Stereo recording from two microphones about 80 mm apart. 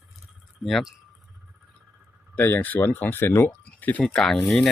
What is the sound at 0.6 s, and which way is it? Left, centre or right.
Speech, centre.